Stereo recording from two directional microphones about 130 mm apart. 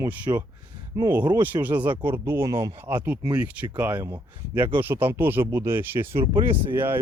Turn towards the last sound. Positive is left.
turn(degrees=-15)  # may be behind; listen again after turning